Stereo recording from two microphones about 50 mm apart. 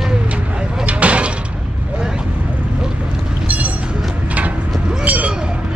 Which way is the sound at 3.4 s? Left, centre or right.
Right.